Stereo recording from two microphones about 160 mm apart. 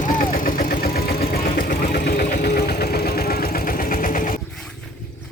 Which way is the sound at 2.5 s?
75° left (ahead or behind).